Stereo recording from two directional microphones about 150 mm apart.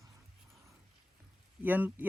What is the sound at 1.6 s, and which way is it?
Speech, 10° right (ahead or behind).